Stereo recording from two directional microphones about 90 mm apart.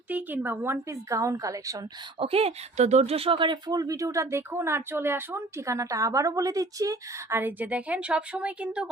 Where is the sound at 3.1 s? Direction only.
80° right; by 7.4 s 35° right (ahead or behind).